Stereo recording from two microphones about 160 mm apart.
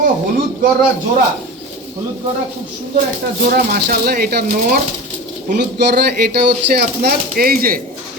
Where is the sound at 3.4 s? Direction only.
75° right (ahead or behind).